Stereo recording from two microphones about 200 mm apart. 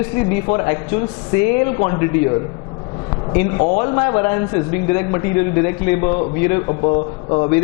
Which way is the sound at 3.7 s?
25° left (ahead or behind).